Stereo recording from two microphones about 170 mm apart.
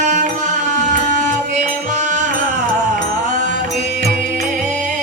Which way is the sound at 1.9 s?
45° right (ahead or behind).